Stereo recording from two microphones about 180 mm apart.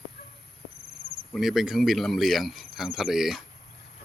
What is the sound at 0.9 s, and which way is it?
Cricket, 60° right (ahead or behind).